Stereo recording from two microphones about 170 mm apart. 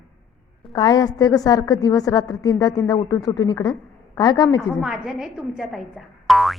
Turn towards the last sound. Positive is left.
turn(degrees=0)  # may be behind; listen again after turning